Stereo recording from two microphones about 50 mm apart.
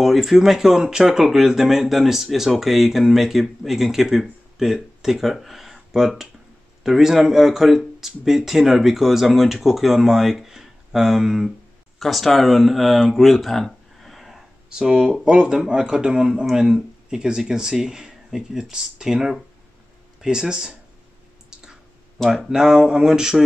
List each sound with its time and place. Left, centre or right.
0.0 s speech: centre
14.7 s speech: centre
22.3 s speech: centre